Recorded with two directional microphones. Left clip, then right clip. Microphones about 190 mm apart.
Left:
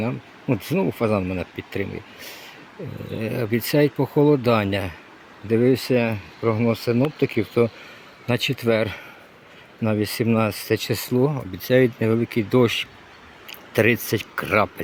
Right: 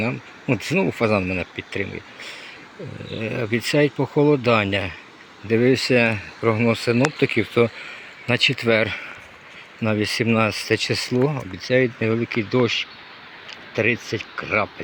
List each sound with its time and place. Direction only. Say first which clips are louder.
0.0 s speech: right 2 dB; 5° left (ahead or behind)
1.5 s speech: right 1 dB; 15° left (ahead or behind)
13.7 s speech: left 2 dB; 35° left (ahead or behind)